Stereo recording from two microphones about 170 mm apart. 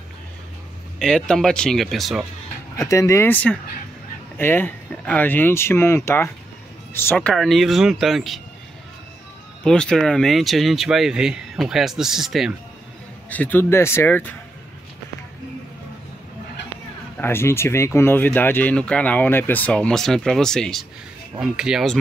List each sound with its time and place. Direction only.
0.9 s speech: 5° left (ahead or behind)
2.8 s speech: 15° left (ahead or behind); by 8.4 s centre (ahead or behind)
9.6 s speech: 5° left (ahead or behind)
13.3 s speech: 10° left (ahead or behind)
17.2 s speech: 15° left (ahead or behind); by 21.9 s 5° right (ahead or behind)